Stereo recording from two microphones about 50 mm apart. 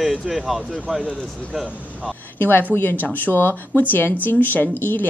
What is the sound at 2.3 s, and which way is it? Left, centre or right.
A woman's voice, left.